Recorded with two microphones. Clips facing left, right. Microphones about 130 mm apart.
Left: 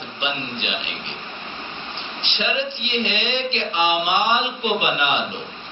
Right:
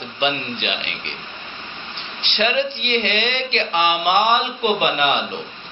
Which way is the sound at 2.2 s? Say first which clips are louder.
Right 5 dB; 65° right (ahead or behind).